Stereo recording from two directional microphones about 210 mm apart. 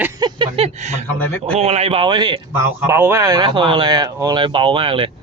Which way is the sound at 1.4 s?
30° right (ahead or behind).